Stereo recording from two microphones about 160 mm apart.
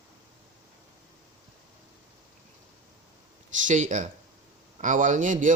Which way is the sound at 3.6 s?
50° right (ahead or behind).